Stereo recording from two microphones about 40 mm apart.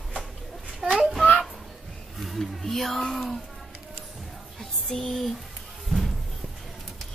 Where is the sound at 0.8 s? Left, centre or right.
Right.